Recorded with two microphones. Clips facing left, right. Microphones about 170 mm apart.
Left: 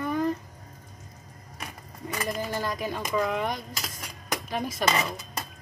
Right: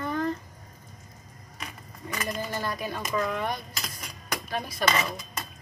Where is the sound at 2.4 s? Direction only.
15° left (ahead or behind).